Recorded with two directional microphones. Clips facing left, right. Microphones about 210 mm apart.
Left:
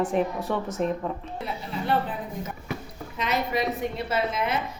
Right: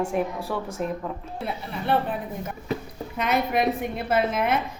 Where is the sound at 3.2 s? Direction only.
55° right (ahead or behind).